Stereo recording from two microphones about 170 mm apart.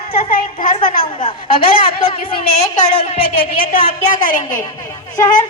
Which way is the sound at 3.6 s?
55° left (ahead or behind).